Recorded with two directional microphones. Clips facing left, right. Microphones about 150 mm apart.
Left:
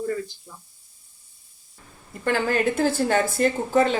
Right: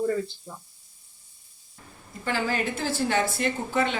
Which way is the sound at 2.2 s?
50° left (ahead or behind).